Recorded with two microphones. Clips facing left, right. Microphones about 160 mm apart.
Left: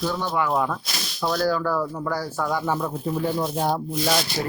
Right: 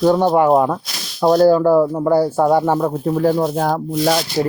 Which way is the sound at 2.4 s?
60° right (ahead or behind).